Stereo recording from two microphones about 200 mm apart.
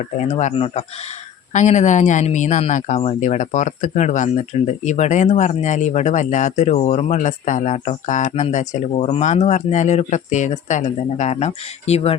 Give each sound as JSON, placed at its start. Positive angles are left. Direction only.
{"t": 0.2, "sound": "speech", "side_deg": 35}